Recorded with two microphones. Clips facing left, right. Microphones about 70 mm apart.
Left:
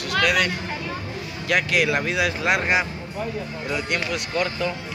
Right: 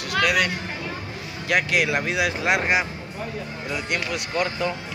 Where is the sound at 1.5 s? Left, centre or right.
Centre.